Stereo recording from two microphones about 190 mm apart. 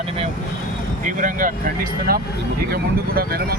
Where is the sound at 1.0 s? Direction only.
45° right (ahead or behind).